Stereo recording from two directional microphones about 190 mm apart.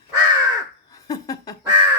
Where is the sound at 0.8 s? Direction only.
20° left (ahead or behind).